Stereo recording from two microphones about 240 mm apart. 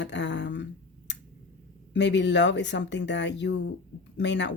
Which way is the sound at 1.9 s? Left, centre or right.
Left.